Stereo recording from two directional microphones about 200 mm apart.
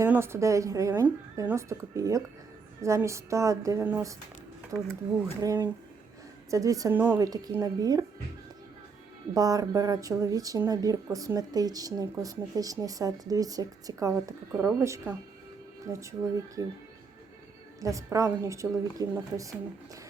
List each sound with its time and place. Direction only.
0.0 s speech: 10° right (ahead or behind)
5.4 s speech: 15° right (ahead or behind)
9.3 s speech: 15° right (ahead or behind)
17.7 s speech: 15° right (ahead or behind)